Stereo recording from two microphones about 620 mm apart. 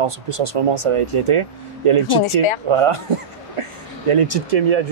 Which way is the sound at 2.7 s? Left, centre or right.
Right.